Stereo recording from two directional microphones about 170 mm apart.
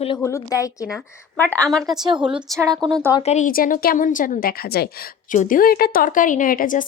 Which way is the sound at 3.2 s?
40° left (ahead or behind).